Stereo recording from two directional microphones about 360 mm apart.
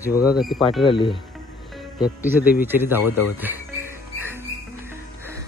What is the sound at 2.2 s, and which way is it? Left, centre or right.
Speech, centre.